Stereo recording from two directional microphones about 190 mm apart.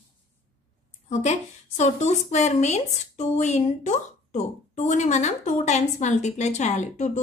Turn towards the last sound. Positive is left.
turn(degrees=40)  # may be behind; listen again after turning